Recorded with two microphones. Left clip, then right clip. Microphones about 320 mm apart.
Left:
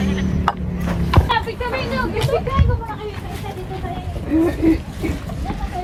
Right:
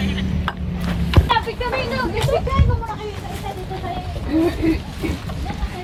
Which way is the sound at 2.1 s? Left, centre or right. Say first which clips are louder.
Even; right.